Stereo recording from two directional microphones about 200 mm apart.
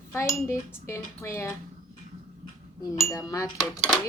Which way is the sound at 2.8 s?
15° left (ahead or behind).